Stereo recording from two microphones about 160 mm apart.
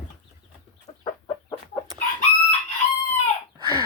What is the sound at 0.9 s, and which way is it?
Chicken, 40° left (ahead or behind).